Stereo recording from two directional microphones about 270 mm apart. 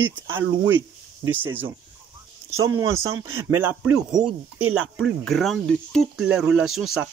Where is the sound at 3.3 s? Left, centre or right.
Right.